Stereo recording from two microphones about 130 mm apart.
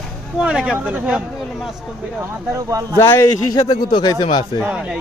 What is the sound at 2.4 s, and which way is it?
Speech, 25° right (ahead or behind).